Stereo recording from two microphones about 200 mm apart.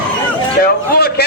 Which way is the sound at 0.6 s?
50° left (ahead or behind).